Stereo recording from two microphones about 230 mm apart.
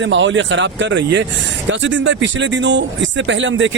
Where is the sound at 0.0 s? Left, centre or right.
Right.